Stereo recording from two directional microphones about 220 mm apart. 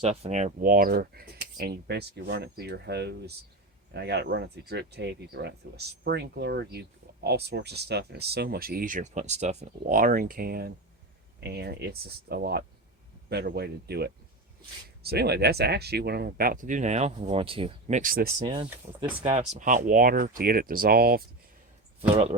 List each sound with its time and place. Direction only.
0.0 s speech: 25° right (ahead or behind)
18.4 s speech: 25° right (ahead or behind); by 21.2 s 45° right (ahead or behind)
22.1 s speech: 30° right (ahead or behind)